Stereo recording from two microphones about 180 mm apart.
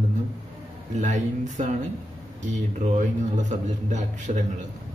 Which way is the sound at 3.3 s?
40° right (ahead or behind).